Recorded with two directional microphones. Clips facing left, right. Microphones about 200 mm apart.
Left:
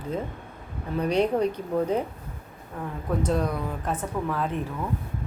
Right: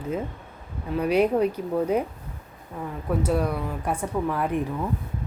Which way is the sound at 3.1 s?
10° right (ahead or behind).